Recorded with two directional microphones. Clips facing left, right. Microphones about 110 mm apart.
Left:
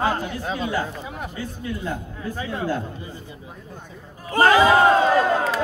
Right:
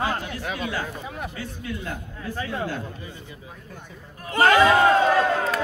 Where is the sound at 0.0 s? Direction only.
30° left (ahead or behind).